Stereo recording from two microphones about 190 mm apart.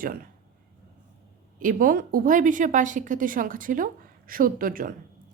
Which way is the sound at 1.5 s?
45° right (ahead or behind).